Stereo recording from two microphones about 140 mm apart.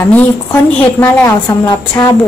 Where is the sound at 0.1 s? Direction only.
15° left (ahead or behind).